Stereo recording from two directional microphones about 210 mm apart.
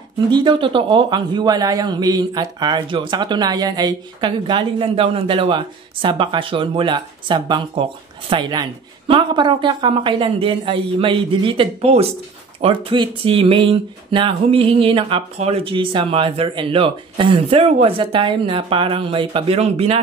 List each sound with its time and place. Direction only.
0.3 s a man's voice: 20° right (ahead or behind)